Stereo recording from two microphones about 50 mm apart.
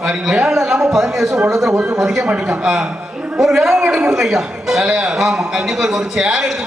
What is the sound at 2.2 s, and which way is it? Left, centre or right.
A man's voice, right.